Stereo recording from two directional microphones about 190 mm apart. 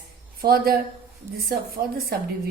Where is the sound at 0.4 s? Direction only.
50° right (ahead or behind).